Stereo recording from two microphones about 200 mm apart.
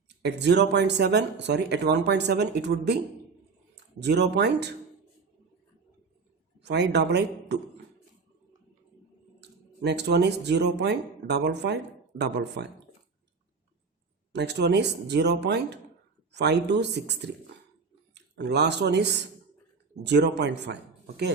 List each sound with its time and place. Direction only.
0.2 s speech: 60° right (ahead or behind)
4.0 s speech: 55° right (ahead or behind)
6.6 s speech: 60° right (ahead or behind)
9.4 s speech: 55° right (ahead or behind)
14.3 s speech: 55° right (ahead or behind)